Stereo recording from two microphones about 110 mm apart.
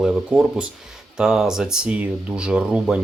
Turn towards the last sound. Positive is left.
turn(degrees=-10)  # may be behind; listen again after turning